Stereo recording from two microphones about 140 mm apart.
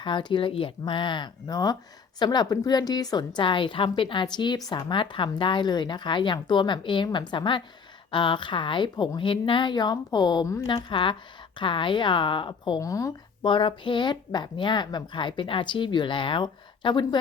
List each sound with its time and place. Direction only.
0.0 s a woman's voice: 35° left (ahead or behind)
12.8 s speech: 25° left (ahead or behind)
13.4 s a woman's voice: 35° left (ahead or behind)